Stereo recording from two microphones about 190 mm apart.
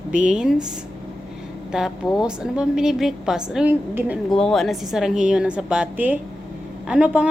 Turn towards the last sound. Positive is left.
turn(degrees=-5)  # may be behind; listen again after turning